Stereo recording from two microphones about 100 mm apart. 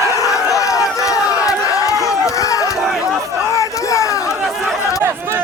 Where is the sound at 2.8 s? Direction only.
Centre (ahead or behind).